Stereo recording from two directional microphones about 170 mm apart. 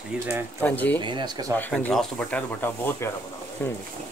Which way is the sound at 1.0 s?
25° right (ahead or behind).